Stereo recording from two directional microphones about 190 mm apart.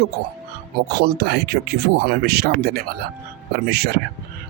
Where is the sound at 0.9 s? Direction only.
55° right (ahead or behind).